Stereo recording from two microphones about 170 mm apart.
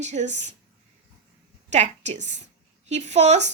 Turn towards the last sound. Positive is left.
turn(degrees=-40)  # may be behind; listen again after turning